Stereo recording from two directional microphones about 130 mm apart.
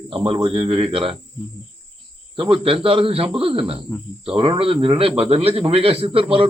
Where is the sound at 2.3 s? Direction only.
40° right (ahead or behind).